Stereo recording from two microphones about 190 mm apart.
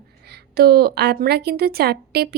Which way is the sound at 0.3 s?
55° right (ahead or behind).